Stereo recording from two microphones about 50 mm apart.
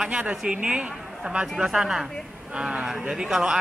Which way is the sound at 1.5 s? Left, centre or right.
Centre.